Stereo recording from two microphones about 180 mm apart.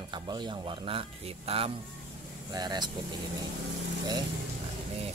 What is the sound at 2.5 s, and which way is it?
Speech, 25° right (ahead or behind).